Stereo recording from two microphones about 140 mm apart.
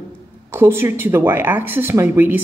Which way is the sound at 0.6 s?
15° right (ahead or behind).